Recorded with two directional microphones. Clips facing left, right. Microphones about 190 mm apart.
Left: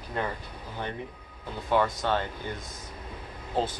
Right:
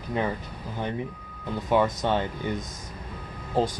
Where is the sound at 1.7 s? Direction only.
15° right (ahead or behind).